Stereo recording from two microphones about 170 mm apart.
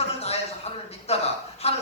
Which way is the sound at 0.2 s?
35° left (ahead or behind).